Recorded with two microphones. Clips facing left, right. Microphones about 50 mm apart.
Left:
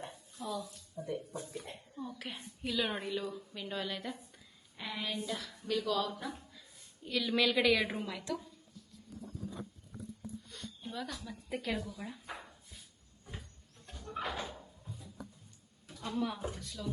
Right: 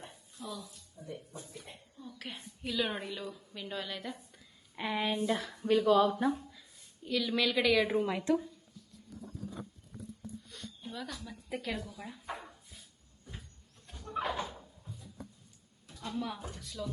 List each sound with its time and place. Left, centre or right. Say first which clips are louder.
0.3 s speech: left 4 dB; centre
2.0 s a woman's voice: left 2 dB; centre
4.8 s speech: right 7 dB; right
6.5 s a woman's voice: even; centre
8.0 s speech: right 9 dB; right
10.5 s speech: left 1 dB; centre
14.1 s slam: right 4 dB; centre
14.5 s a sound: even; centre
16.0 s a woman's voice: left 2 dB; centre